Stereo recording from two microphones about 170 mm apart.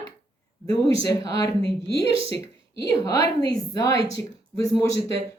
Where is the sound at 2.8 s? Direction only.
20° left (ahead or behind).